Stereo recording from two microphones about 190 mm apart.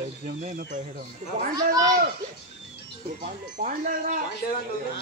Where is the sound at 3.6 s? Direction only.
40° right (ahead or behind).